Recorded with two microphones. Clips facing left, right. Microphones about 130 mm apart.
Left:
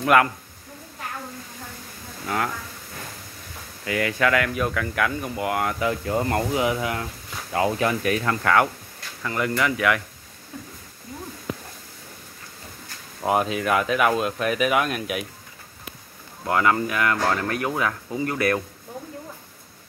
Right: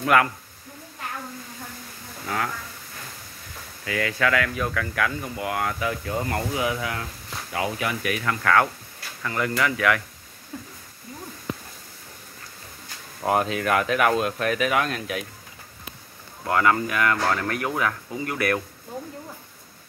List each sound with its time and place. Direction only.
0.0 s speech: 20° left (ahead or behind)
2.2 s speech: 20° left (ahead or behind)
3.8 s speech: 20° left (ahead or behind)
7.5 s speech: 35° left (ahead or behind)
13.2 s speech: 5° left (ahead or behind)
16.4 s speech: 20° left (ahead or behind)